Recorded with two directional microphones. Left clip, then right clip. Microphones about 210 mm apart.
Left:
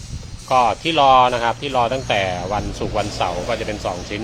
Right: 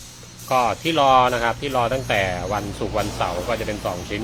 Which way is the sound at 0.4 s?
10° left (ahead or behind).